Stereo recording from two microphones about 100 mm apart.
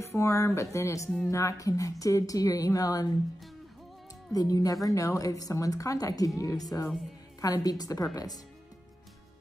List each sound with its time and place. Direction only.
0.0 s a woman's voice: 30° left (ahead or behind)
4.3 s a woman's voice: 35° left (ahead or behind)